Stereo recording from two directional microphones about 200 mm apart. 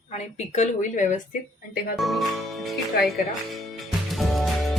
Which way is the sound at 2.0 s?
Centre (ahead or behind).